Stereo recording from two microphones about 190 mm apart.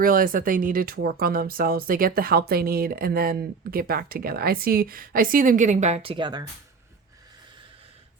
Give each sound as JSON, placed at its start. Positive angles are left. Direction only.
{"t": 0.0, "sound": "speech", "side_deg": -50}